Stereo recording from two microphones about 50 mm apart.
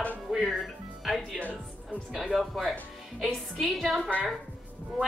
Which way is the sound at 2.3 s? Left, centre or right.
Centre.